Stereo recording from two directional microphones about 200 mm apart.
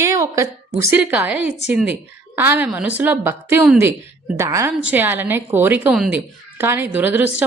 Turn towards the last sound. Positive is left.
turn(degrees=-10)  # may be behind; listen again after turning